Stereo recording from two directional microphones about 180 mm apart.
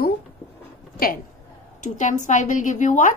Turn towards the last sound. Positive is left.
turn(degrees=45)  # may be behind; listen again after turning